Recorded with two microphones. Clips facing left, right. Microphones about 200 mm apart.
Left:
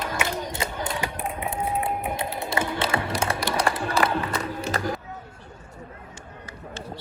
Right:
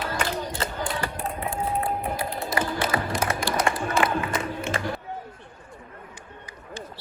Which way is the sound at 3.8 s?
35° left (ahead or behind).